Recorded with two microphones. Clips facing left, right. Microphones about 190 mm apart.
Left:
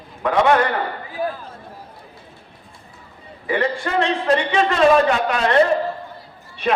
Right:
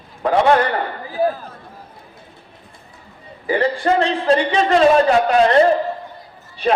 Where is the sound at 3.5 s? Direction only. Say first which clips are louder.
Right 4 dB; 35° right (ahead or behind).